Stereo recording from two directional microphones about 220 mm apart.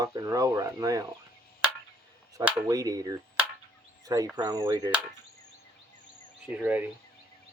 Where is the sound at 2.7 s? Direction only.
15° right (ahead or behind).